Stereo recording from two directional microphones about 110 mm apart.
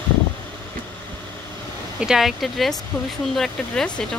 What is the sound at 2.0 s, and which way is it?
Speech, 5° right (ahead or behind).